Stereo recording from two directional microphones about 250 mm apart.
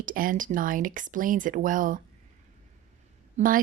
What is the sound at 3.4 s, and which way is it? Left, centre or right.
Speech, right.